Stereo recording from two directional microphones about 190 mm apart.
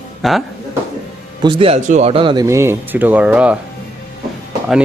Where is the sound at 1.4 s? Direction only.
25° right (ahead or behind).